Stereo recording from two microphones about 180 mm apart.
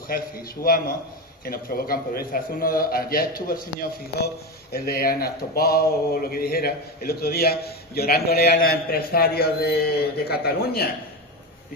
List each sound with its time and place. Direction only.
0.1 s speech: 55° left (ahead or behind)
4.7 s speech: 55° left (ahead or behind)